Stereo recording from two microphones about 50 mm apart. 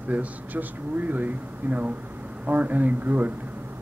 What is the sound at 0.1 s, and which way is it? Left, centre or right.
Speech, right.